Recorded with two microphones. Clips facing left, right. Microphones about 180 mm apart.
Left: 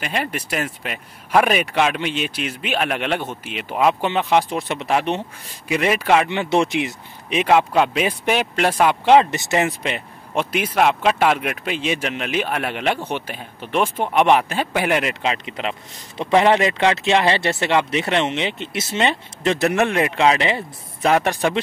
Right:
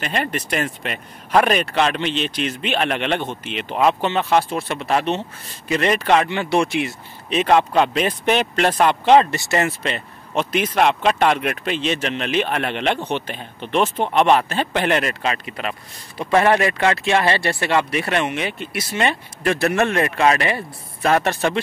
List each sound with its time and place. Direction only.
0.0 s speech: 5° left (ahead or behind)